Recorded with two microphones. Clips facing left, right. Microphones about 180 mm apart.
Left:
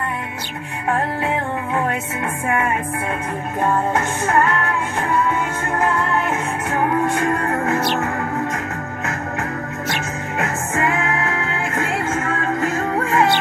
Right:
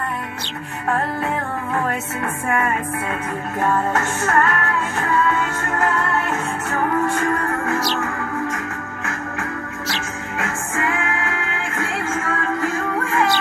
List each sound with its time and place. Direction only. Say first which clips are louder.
3.6 s music: left 1 dB; 15° left (ahead or behind)
10.4 s music: left 3 dB; 20° left (ahead or behind)
12.9 s music: left 3 dB; 30° left (ahead or behind)